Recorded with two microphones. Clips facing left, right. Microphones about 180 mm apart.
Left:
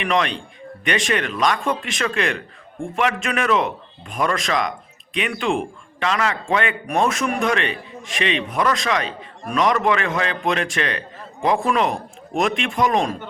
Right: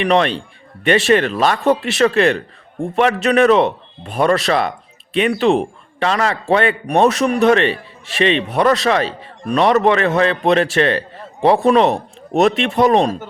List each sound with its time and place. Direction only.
0.0 s a man's voice: 35° right (ahead or behind)